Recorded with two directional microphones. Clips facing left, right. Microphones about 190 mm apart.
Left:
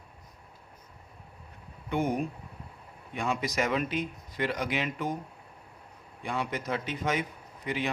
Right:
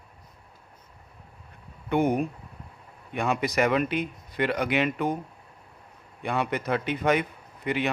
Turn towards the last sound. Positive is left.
turn(degrees=-65)  # may be behind; listen again after turning